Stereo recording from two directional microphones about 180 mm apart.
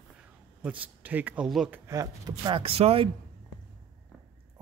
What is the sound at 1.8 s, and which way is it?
Speech, 20° right (ahead or behind).